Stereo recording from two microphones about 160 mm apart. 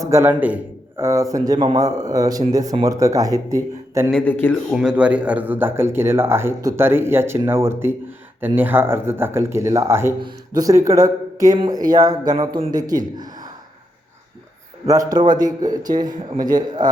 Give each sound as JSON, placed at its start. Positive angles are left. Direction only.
{"t": 0.0, "sound": "speech", "side_deg": -15}
{"t": 4.1, "sound": "speech", "side_deg": 10}
{"t": 4.7, "sound": "speech", "side_deg": -5}
{"t": 10.2, "sound": "speech", "side_deg": -25}
{"t": 13.1, "sound": "gasp", "side_deg": -25}
{"t": 14.8, "sound": "speech", "side_deg": -25}